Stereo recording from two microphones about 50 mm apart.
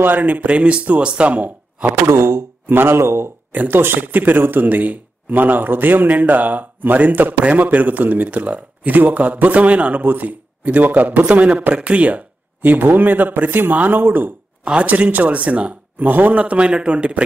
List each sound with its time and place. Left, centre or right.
0.0 s speech: right
2.0 s speech: right
3.5 s speech: right
14.6 s speech: right
14.9 s speech: right